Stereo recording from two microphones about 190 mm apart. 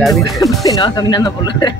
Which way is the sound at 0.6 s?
20° left (ahead or behind).